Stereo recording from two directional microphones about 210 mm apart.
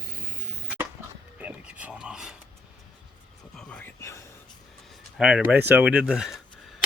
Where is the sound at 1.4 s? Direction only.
5° right (ahead or behind).